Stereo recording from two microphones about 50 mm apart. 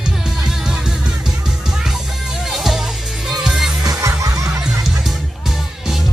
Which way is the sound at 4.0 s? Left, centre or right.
Right.